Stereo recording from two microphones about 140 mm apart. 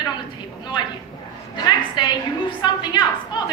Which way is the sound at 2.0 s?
30° left (ahead or behind).